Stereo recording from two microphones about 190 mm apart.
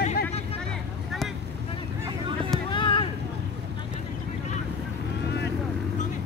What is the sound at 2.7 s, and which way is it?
Vehicle, 25° left (ahead or behind).